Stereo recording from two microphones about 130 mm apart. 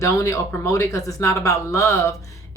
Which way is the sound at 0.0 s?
25° left (ahead or behind).